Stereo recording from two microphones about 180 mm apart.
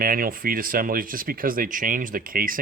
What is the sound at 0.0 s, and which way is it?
Speech, 55° right (ahead or behind).